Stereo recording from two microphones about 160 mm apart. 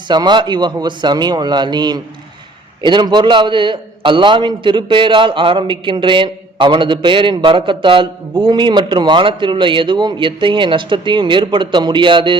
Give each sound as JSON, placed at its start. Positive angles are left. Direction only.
{"t": 0.1, "sound": "a man's voice", "side_deg": -25}